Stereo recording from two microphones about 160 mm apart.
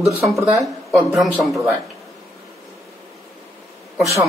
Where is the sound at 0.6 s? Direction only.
Centre (ahead or behind).